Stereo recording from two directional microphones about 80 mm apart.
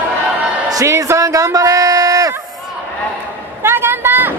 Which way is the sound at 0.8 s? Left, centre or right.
Right.